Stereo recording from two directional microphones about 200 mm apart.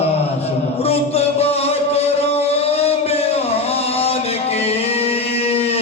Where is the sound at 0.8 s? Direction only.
30° left (ahead or behind).